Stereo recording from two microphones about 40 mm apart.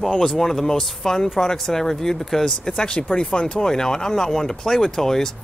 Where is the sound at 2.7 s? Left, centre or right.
Left.